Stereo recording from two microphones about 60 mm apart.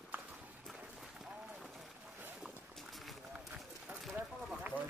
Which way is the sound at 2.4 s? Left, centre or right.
Centre.